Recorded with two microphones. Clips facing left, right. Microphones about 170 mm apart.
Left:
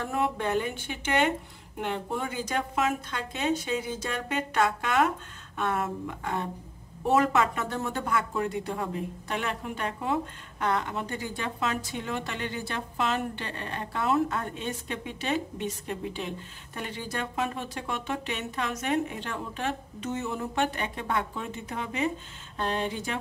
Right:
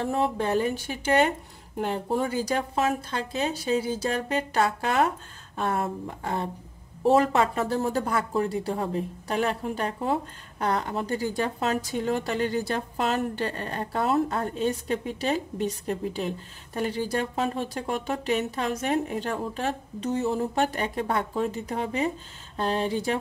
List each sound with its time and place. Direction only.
0.0 s a woman's voice: 30° right (ahead or behind)